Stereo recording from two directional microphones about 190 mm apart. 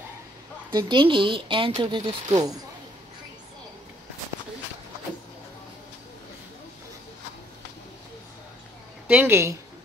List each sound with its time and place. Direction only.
0.7 s speech: 25° right (ahead or behind)
9.0 s a woman's voice: 10° right (ahead or behind)